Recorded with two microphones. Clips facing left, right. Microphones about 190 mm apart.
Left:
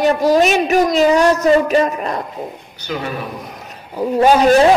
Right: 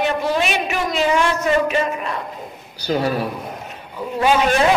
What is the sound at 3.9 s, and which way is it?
Speech, 40° left (ahead or behind).